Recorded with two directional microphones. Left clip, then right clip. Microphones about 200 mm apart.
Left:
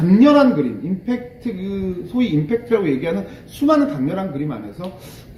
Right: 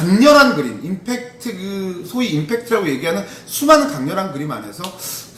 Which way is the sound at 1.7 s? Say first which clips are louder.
Left 1 dB; 5° right (ahead or behind).